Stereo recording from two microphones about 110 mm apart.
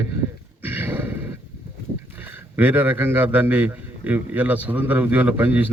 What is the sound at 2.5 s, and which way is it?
A man's voice, 15° right (ahead or behind).